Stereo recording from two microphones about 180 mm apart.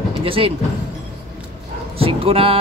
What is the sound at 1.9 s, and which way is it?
Speech, 30° right (ahead or behind).